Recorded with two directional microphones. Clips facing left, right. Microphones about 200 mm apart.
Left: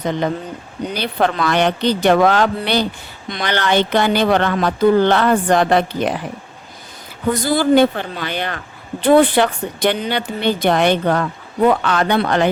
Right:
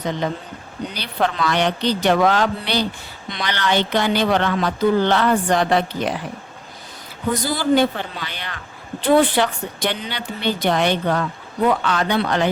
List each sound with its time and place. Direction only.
0.9 s a woman's voice: 50° left (ahead or behind)
7.4 s a woman's voice: 55° left (ahead or behind)